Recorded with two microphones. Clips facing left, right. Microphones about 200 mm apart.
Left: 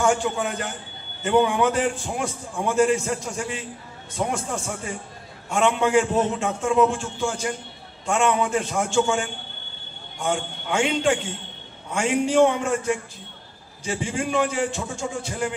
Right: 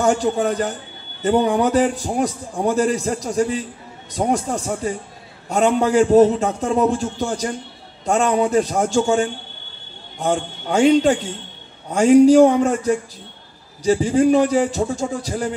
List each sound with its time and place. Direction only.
0.0 s a man's voice: 40° right (ahead or behind)